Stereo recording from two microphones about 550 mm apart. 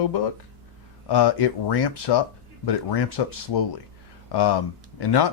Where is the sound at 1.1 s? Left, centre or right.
Left.